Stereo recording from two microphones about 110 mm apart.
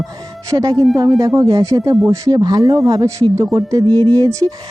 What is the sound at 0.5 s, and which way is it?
Speech, 35° right (ahead or behind).